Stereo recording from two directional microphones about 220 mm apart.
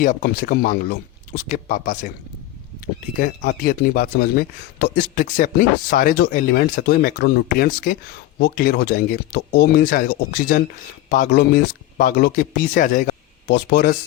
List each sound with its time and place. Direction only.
0.0 s speech: 40° left (ahead or behind)
3.2 s speech: 35° left (ahead or behind)